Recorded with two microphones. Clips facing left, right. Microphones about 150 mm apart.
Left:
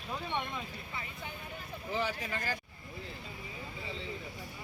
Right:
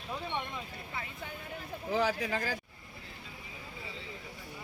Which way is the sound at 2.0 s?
90° right.